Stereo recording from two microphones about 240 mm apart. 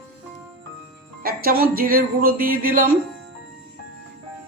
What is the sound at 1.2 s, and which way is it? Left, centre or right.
Speech, right.